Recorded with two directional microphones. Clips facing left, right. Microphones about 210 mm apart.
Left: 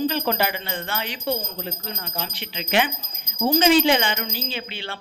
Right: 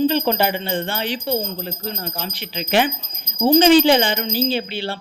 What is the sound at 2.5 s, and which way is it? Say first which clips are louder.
A woman's voice: right 4 dB; 35° right (ahead or behind).